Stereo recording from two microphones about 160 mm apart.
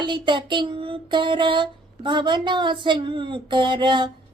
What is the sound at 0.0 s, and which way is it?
Child singing, 30° right (ahead or behind).